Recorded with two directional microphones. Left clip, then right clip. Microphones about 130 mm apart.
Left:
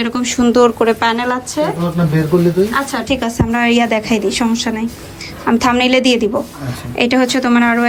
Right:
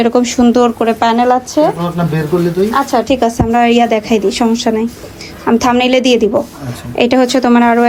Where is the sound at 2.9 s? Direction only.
50° right (ahead or behind).